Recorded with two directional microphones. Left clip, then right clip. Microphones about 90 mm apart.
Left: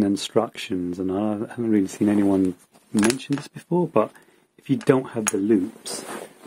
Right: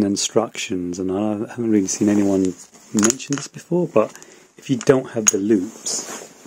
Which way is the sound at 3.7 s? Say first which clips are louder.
Right 3 dB; 15° right (ahead or behind).